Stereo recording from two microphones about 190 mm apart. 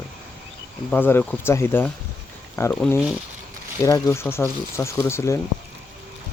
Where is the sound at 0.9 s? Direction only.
10° left (ahead or behind).